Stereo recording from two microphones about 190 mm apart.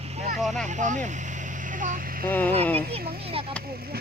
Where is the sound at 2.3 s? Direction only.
10° left (ahead or behind).